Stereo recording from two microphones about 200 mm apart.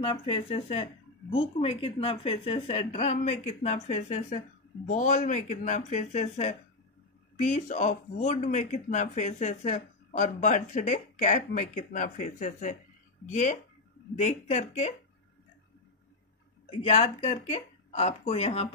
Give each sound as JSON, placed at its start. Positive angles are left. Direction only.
{"t": 0.0, "sound": "speech", "side_deg": 25}
{"t": 16.8, "sound": "speech", "side_deg": 30}